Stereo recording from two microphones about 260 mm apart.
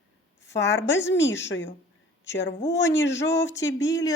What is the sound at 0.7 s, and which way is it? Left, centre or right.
A woman's voice, left.